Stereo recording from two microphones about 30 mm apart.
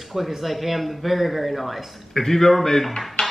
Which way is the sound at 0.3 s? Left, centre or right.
Centre.